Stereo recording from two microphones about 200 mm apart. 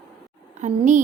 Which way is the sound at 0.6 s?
35° right (ahead or behind).